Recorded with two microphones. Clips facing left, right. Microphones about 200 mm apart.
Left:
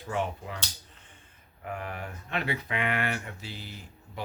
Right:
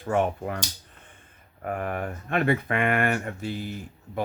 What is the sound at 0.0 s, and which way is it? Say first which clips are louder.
Speech: right 7 dB; 55° right (ahead or behind).